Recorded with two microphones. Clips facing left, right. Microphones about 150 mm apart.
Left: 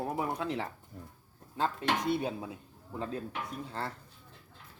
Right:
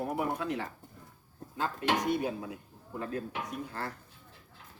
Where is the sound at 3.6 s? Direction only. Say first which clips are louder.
Left 1 dB; 25° left (ahead or behind).